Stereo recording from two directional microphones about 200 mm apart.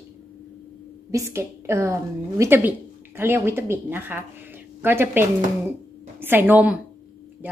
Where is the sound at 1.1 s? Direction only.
15° right (ahead or behind).